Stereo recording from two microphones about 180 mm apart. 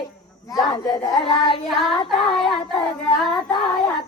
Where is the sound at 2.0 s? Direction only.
5° left (ahead or behind).